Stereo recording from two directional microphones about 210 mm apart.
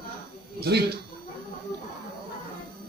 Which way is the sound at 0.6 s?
50° right (ahead or behind).